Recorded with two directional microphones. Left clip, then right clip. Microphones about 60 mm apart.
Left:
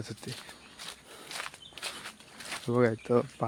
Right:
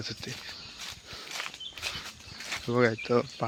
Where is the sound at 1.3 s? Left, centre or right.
Centre.